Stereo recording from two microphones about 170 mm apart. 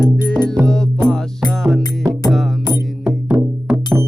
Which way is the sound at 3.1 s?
5° right (ahead or behind).